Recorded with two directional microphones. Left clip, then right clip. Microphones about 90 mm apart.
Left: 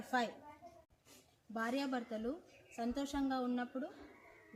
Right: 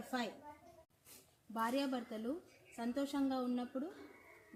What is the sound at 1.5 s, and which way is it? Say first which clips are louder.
A woman's voice: right 1 dB; 5° left (ahead or behind).